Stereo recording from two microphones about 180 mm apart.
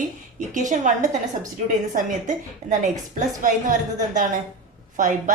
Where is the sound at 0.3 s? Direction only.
45° right (ahead or behind).